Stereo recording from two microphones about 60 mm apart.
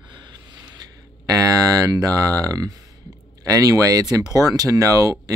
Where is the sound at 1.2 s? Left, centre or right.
Right.